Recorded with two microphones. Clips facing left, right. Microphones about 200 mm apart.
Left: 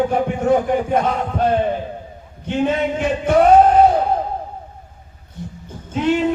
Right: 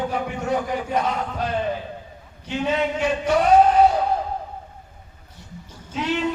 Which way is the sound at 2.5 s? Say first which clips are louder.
Left 4 dB; 50° left (ahead or behind).